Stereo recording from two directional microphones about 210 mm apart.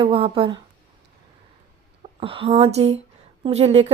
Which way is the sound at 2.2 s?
25° right (ahead or behind).